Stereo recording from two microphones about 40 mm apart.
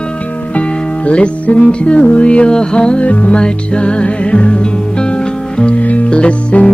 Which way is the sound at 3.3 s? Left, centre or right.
Left.